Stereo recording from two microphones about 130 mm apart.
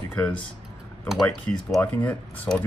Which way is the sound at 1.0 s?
Centre (ahead or behind).